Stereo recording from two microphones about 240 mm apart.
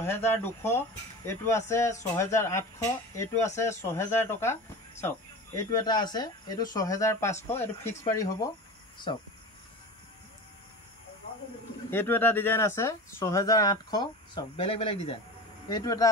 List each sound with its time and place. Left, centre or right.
0.0 s speech: centre
11.9 s speech: centre